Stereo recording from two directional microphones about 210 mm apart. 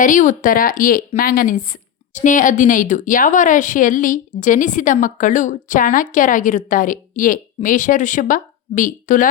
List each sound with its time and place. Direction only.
0.0 s speech: 40° left (ahead or behind)